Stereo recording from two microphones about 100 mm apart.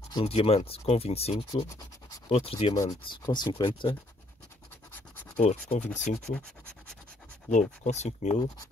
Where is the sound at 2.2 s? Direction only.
70° left (ahead or behind).